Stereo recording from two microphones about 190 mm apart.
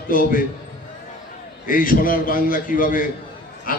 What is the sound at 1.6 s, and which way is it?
A man's voice, 45° left (ahead or behind).